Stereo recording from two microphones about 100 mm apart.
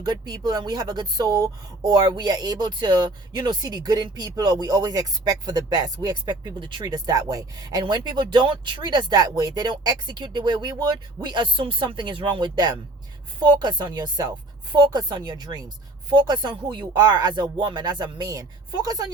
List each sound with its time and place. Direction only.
0.0 s speech: 40° right (ahead or behind)
6.8 s speech: 40° right (ahead or behind)